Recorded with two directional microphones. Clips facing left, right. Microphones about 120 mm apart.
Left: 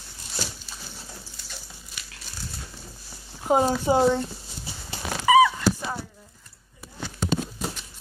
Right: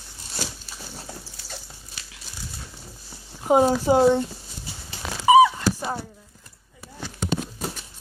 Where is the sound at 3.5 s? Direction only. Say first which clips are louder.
Right 3 dB; 10° right (ahead or behind).